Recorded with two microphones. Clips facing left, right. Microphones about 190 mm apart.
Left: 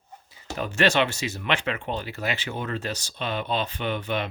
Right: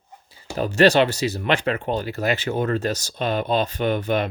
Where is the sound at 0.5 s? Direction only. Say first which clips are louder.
Right 7 dB; 35° right (ahead or behind).